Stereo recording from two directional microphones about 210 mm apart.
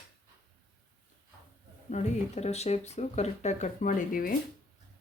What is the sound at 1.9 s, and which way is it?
Speech, 35° left (ahead or behind).